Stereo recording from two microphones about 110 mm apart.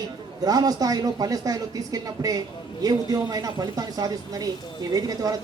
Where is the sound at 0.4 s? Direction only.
35° right (ahead or behind).